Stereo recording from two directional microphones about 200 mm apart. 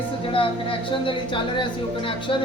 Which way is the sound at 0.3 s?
25° left (ahead or behind).